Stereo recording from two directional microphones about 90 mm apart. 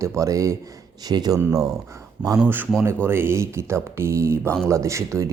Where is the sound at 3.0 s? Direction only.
25° right (ahead or behind).